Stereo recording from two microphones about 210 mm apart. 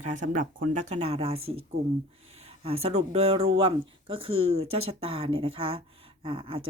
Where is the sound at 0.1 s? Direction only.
40° right (ahead or behind).